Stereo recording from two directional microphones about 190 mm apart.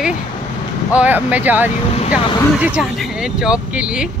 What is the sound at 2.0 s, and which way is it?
Speech, 30° left (ahead or behind).